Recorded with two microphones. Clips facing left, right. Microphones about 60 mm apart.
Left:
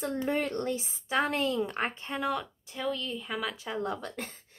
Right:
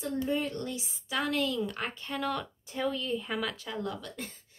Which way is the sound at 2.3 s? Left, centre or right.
Centre.